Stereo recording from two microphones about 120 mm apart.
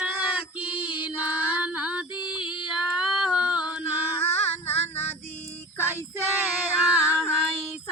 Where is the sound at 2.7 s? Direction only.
5° right (ahead or behind).